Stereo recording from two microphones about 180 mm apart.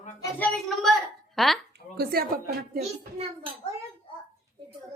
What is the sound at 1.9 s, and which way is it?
Speech, 60° right (ahead or behind).